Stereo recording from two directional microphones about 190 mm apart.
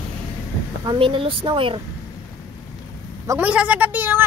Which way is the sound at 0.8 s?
25° right (ahead or behind).